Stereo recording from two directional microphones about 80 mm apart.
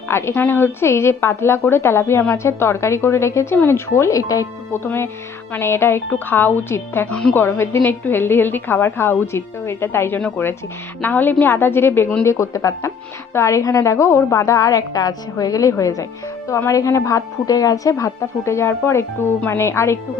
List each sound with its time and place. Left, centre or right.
0.1 s a woman's voice: left
4.7 s a woman's voice: left
7.1 s a woman's voice: centre
7.3 s a woman's voice: left